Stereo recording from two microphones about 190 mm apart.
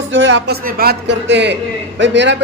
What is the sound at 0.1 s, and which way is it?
A man's voice, 80° right.